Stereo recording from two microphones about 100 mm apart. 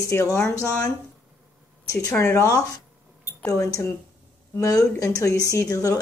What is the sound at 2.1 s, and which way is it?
A woman's voice, 30° left (ahead or behind).